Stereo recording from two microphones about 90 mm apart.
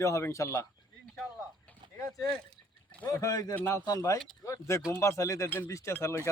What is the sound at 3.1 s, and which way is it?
Speech, 40° left (ahead or behind).